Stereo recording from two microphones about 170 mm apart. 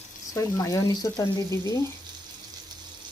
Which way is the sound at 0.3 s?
20° left (ahead or behind).